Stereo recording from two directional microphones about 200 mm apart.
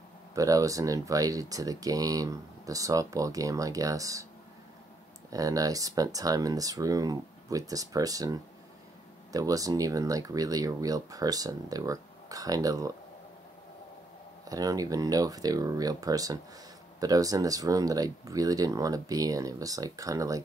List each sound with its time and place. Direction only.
0.3 s speech: 15° right (ahead or behind)
5.3 s speech: 15° right (ahead or behind)
14.5 s speech: 20° right (ahead or behind)